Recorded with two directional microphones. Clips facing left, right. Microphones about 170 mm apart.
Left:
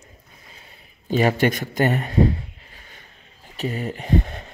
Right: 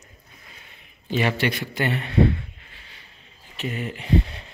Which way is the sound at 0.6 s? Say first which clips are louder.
Left 5 dB; 40° left (ahead or behind).